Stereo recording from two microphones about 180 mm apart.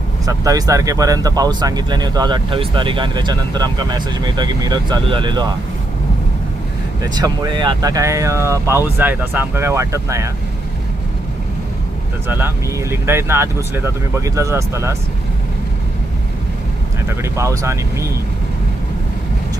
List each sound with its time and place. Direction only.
0.3 s speech: 20° right (ahead or behind)
7.0 s speech: 25° right (ahead or behind)
12.3 s speech: 15° right (ahead or behind)
17.1 s speech: 15° right (ahead or behind)